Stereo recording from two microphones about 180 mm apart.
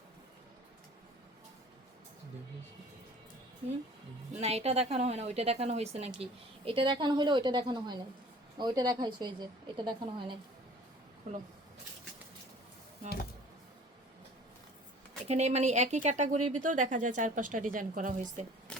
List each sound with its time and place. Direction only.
4.4 s a woman's voice: 35° right (ahead or behind)
15.3 s speech: 35° right (ahead or behind)
18.7 s a sound: 5° left (ahead or behind)